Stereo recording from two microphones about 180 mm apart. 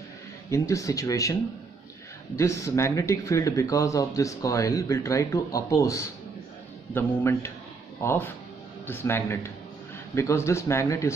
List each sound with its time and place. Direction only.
0.5 s speech: 15° left (ahead or behind)